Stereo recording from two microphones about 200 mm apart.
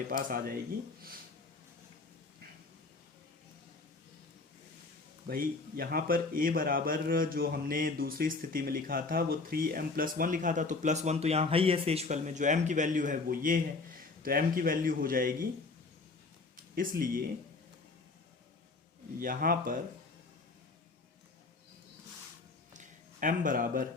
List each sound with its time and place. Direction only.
0.1 s speech: 45° right (ahead or behind)
5.3 s speech: 45° right (ahead or behind)
16.7 s speech: 45° right (ahead or behind)
19.2 s speech: 45° right (ahead or behind)
22.7 s a sound: 40° right (ahead or behind)